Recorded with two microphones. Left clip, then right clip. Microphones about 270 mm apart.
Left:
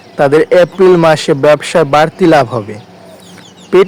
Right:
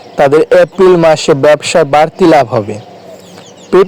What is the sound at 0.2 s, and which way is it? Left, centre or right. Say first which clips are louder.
A man's voice: right 1 dB; centre.